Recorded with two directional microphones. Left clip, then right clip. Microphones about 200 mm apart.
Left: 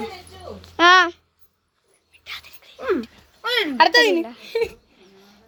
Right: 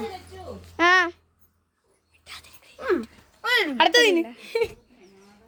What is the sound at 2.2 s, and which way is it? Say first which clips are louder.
Dog: left 7 dB; 5° right (ahead or behind).